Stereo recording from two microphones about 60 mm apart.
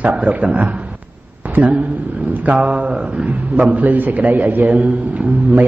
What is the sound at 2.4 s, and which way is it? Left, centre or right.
A man's voice, right.